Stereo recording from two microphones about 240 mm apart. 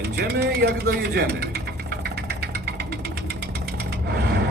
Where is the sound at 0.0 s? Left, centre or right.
Right.